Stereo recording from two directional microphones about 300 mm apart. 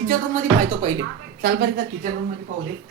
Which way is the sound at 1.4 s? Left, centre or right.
Right.